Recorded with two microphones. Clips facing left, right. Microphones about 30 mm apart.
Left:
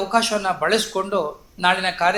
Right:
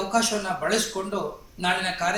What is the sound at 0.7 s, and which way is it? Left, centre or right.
Speech, left.